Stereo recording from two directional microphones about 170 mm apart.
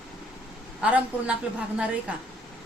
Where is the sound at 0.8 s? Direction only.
10° right (ahead or behind).